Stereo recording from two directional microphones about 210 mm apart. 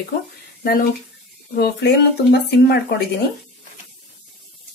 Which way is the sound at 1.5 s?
50° left (ahead or behind).